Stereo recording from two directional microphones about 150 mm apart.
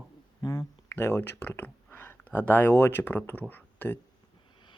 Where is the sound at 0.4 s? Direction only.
25° left (ahead or behind).